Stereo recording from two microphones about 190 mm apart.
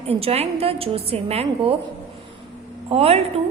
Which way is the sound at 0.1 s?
30° right (ahead or behind).